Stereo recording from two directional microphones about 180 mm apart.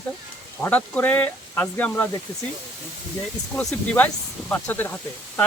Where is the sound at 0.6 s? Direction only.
10° left (ahead or behind).